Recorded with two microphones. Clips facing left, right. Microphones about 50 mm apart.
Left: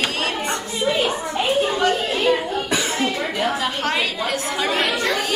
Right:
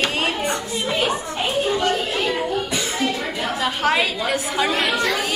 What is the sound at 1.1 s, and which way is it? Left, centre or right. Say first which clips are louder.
Children playing: left 2 dB; left.